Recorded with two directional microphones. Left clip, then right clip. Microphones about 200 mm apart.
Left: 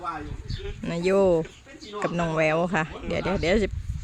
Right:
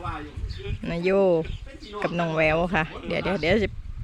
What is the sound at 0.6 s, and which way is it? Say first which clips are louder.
Speech: even; centre (ahead or behind).